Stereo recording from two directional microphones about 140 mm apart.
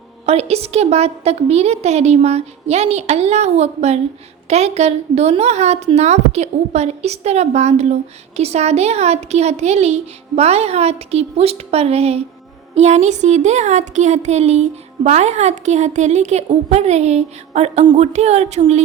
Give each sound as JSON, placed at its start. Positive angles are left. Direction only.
{"t": 0.3, "sound": "a woman's voice", "side_deg": -45}